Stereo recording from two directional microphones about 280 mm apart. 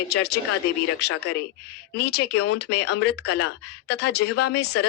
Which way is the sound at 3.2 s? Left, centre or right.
Left.